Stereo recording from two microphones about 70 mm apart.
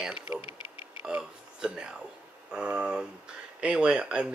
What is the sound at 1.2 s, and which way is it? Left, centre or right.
Speech, centre.